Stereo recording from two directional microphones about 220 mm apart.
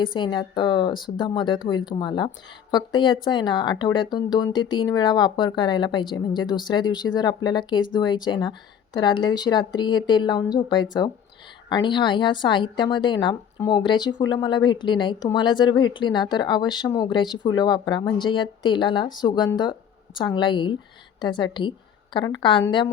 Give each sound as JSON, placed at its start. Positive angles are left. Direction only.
{"t": 0.0, "sound": "a woman's voice", "side_deg": 20}